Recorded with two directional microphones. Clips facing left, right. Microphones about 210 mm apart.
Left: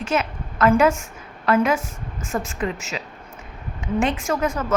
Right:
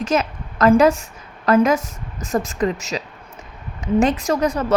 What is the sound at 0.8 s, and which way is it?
A woman's voice, 35° right (ahead or behind).